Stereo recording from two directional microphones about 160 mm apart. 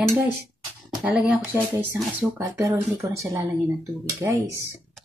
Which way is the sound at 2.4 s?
20° right (ahead or behind).